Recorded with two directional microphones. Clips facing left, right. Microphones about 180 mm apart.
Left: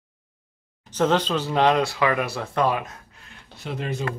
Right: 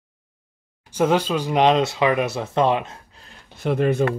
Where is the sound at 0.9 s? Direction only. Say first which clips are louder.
Right 2 dB; 10° right (ahead or behind); by 3.3 s 25° right (ahead or behind).